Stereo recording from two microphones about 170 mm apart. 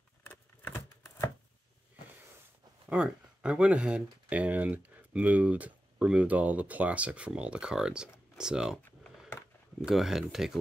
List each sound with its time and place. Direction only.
0.2 s a sound: 10° left (ahead or behind)
2.9 s speech: 5° right (ahead or behind)
9.8 s speech: centre (ahead or behind)